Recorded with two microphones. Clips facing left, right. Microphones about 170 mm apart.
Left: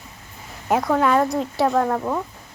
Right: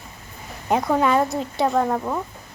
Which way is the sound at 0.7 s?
Centre (ahead or behind).